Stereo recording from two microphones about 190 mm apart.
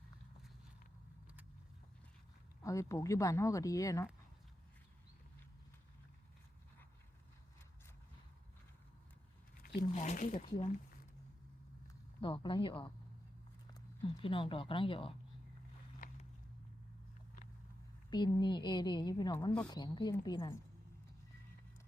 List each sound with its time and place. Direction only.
2.6 s speech: 15° left (ahead or behind)
9.6 s squish: 55° left (ahead or behind)
9.9 s speech: 40° left (ahead or behind)
12.2 s a woman's voice: 25° left (ahead or behind)
14.2 s a woman's voice: 30° left (ahead or behind)
16.0 s walk: 45° left (ahead or behind)
18.1 s a woman's voice: 25° left (ahead or behind)